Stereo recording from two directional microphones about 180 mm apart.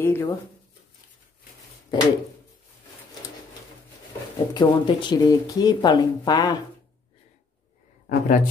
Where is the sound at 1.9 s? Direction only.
25° left (ahead or behind).